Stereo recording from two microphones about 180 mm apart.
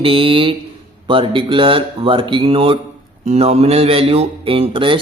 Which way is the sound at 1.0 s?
30° right (ahead or behind).